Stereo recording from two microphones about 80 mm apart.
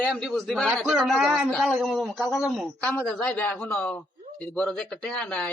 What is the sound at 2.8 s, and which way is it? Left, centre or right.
Speech, centre.